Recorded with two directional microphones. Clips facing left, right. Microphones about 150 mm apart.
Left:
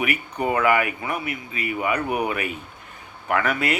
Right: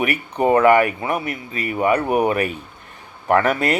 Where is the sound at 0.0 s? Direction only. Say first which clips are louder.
Right 5 dB; 35° right (ahead or behind).